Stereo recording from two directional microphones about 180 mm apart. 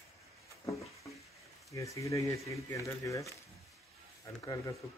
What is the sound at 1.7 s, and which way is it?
Speech, 15° left (ahead or behind).